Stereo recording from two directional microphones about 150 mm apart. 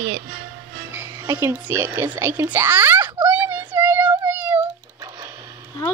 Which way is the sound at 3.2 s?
15° right (ahead or behind).